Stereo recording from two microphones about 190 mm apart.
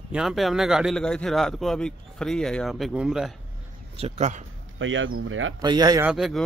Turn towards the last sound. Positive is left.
turn(degrees=0)  # may be behind; listen again after turning